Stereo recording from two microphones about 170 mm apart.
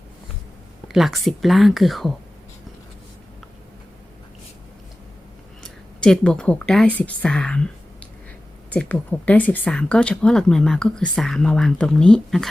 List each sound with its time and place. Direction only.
0.9 s speech: centre (ahead or behind)
5.6 s speech: 5° left (ahead or behind)
8.7 s speech: 10° left (ahead or behind)